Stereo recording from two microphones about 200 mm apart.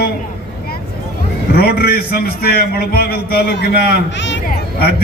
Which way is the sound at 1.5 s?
50° left (ahead or behind).